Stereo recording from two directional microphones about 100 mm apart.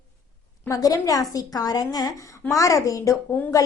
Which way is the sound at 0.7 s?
35° left (ahead or behind).